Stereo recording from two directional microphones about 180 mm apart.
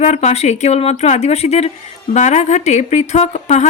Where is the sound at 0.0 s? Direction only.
40° left (ahead or behind).